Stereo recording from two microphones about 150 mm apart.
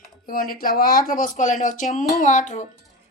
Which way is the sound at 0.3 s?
70° left (ahead or behind).